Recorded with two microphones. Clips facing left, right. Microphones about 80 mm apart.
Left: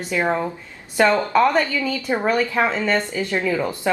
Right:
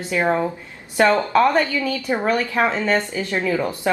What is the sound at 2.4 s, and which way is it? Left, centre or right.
A woman's voice, centre.